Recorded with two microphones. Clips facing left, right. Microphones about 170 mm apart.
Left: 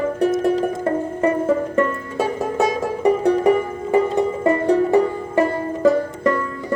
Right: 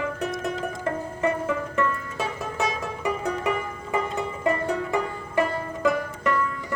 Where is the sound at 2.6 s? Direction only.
35° left (ahead or behind).